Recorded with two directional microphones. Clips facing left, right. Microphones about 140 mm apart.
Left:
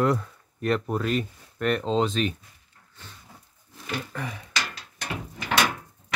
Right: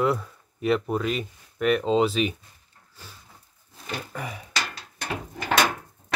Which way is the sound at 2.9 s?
5° right (ahead or behind).